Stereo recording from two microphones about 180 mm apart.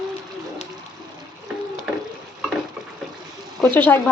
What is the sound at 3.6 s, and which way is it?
Speech, 10° left (ahead or behind).